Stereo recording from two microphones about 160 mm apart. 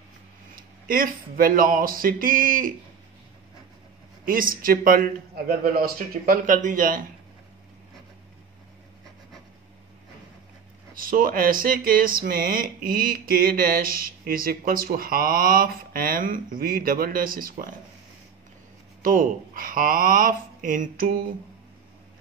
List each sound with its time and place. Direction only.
0.6 s speech: 65° right (ahead or behind)
4.2 s speech: 60° right (ahead or behind)
11.0 s speech: 60° right (ahead or behind)
19.0 s speech: 60° right (ahead or behind)